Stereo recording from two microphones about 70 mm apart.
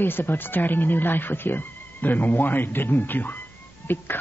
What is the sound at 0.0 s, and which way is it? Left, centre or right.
Speech, left.